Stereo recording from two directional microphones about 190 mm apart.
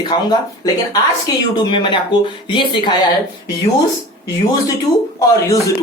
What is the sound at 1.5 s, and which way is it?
Speech, 25° left (ahead or behind).